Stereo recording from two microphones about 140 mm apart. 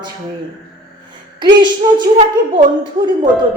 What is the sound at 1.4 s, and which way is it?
Speech, 30° right (ahead or behind).